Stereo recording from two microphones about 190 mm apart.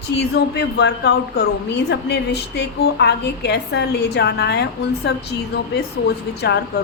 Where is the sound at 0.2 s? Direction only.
60° left (ahead or behind).